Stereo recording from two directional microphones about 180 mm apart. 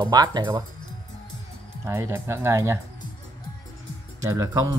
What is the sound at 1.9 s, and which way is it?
Speech, 15° right (ahead or behind).